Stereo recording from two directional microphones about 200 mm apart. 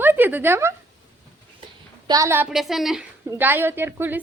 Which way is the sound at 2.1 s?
15° right (ahead or behind).